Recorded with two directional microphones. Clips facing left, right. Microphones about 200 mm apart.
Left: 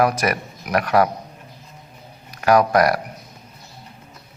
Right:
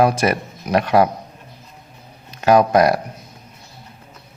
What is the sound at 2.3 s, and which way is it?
Speech, 25° right (ahead or behind).